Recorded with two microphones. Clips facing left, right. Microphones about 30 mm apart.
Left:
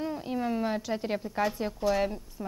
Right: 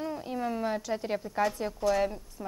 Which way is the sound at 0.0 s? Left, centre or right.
Centre.